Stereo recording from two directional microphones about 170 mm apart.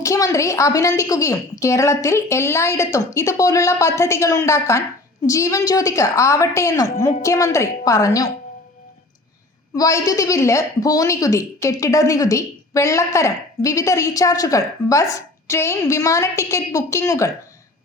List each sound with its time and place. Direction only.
0.0 s a woman's voice: 20° left (ahead or behind)
9.7 s a woman's voice: 20° left (ahead or behind)